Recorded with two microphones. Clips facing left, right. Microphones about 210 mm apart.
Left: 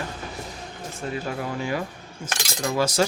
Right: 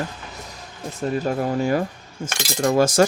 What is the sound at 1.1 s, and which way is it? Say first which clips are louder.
Speech: right 7 dB; 45° right (ahead or behind).